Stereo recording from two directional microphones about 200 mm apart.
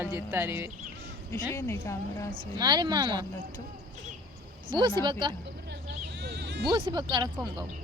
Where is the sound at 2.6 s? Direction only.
20° right (ahead or behind).